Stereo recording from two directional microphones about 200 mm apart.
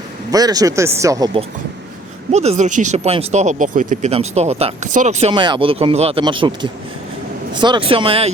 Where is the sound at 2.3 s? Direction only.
35° right (ahead or behind).